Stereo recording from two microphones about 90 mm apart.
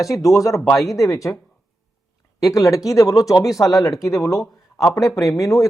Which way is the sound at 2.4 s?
40° left (ahead or behind).